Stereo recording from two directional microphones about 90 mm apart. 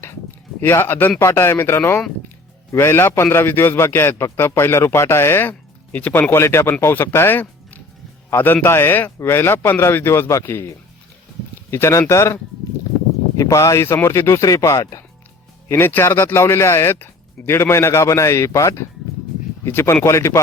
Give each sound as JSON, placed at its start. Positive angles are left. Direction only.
{"t": 0.6, "sound": "a man's voice", "side_deg": 25}
{"t": 11.7, "sound": "speech", "side_deg": 30}
{"t": 15.7, "sound": "a man's voice", "side_deg": 25}